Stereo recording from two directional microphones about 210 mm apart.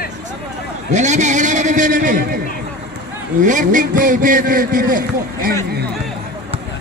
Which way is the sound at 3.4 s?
40° right (ahead or behind).